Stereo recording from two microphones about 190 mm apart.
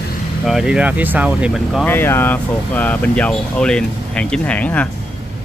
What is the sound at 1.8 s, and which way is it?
Speech, 10° left (ahead or behind).